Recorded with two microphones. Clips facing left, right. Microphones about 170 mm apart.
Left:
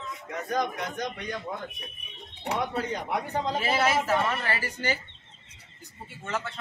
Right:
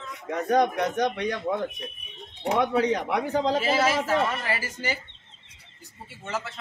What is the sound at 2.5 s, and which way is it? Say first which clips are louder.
Speech: right 7 dB; 85° right.